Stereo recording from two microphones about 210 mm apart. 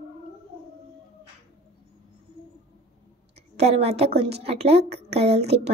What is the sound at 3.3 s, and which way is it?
A woman's voice, 30° right (ahead or behind).